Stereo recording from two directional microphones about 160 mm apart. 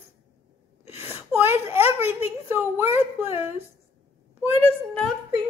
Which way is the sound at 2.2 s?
15° right (ahead or behind).